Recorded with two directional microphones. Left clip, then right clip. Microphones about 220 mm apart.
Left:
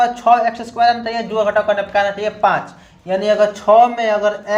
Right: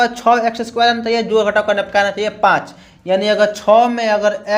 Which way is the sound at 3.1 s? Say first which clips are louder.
Right 1 dB; 45° right (ahead or behind).